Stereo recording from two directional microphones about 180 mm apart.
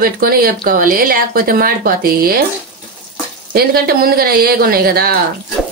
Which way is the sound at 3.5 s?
60° right (ahead or behind).